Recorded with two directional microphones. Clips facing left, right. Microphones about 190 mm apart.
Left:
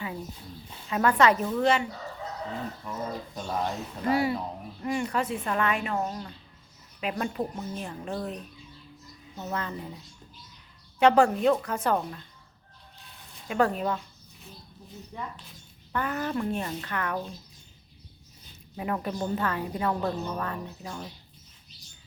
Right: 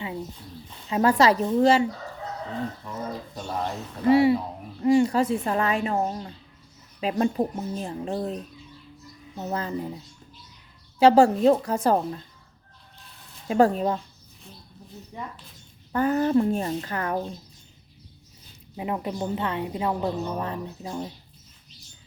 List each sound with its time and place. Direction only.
0.0 s a sound: 25° right (ahead or behind)
0.9 s a woman's voice: 25° right (ahead or behind)
4.1 s a woman's voice: 25° right (ahead or behind)
11.0 s a woman's voice: 30° right (ahead or behind)
13.5 s speech: 35° right (ahead or behind)
15.1 s a woman's voice: 20° right (ahead or behind)
15.9 s speech: 35° right (ahead or behind)
18.8 s a woman's voice: 20° right (ahead or behind)